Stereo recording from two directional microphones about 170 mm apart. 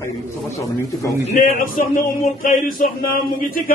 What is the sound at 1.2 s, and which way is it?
Speech, 50° left (ahead or behind).